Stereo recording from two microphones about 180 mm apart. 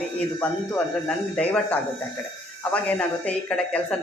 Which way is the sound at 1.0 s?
5° left (ahead or behind).